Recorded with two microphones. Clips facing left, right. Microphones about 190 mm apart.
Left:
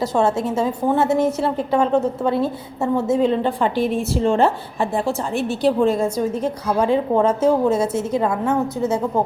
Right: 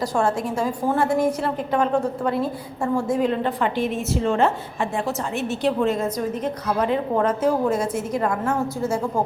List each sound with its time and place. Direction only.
0.0 s a woman's voice: 25° left (ahead or behind)